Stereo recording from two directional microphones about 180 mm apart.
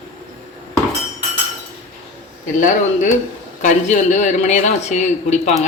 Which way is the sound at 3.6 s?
45° left (ahead or behind).